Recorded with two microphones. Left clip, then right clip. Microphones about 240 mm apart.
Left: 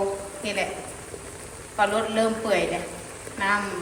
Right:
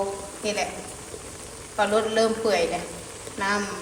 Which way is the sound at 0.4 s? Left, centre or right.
Centre.